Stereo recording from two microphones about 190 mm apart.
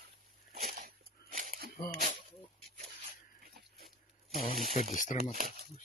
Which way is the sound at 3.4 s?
50° right (ahead or behind).